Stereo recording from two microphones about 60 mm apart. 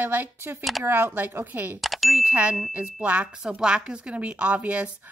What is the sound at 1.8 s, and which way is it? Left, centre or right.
Ding, centre.